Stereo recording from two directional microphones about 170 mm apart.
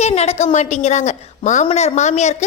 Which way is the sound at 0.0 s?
40° left (ahead or behind).